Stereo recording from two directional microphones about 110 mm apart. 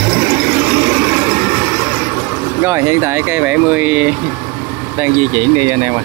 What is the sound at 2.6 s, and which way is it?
Speech, 25° right (ahead or behind).